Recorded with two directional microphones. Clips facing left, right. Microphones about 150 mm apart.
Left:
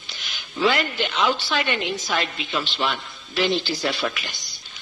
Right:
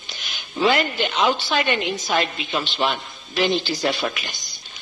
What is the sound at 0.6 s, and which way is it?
A woman's voice, 20° right (ahead or behind).